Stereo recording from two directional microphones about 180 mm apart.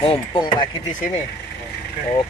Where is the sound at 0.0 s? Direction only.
30° left (ahead or behind).